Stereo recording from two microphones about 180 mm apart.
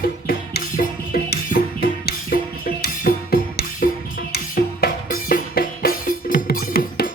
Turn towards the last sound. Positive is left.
turn(degrees=55)  # may be behind; listen again after turning